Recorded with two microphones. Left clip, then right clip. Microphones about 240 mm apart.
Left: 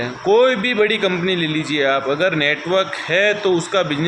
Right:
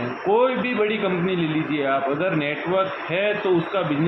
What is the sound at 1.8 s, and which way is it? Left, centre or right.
A man's voice, left.